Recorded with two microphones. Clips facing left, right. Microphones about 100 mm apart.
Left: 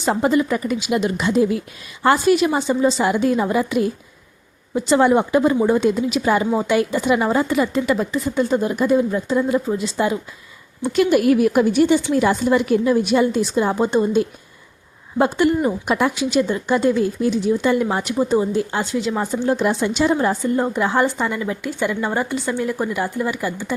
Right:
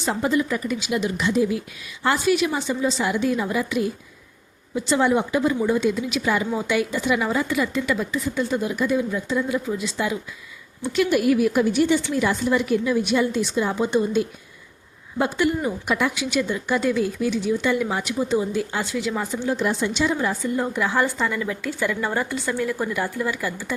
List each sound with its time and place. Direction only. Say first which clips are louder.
0.0 s a woman's voice: left 4 dB; 60° left (ahead or behind)
5.5 s a woman's voice: left 4 dB; 40° left (ahead or behind)
10.8 s a woman's voice: left 4 dB; 50° left (ahead or behind)
15.6 s a woman's voice: left 4 dB; 40° left (ahead or behind)
19.5 s speech: left 4 dB; 60° left (ahead or behind)
20.0 s a woman's voice: left 6 dB; 45° left (ahead or behind)
20.6 s a woman's voice: left 2 dB; 25° left (ahead or behind)